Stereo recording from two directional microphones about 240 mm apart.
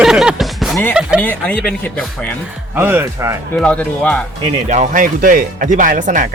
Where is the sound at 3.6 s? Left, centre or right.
Centre.